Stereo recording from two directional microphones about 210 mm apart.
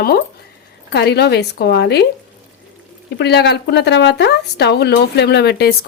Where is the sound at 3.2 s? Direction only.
55° left (ahead or behind).